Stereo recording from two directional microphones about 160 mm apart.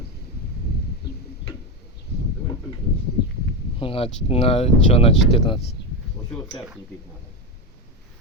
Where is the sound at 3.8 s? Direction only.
35° left (ahead or behind).